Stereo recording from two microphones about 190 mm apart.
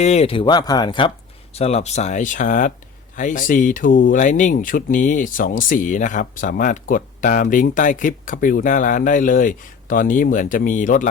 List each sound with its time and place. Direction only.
0.0 s speech: 35° left (ahead or behind)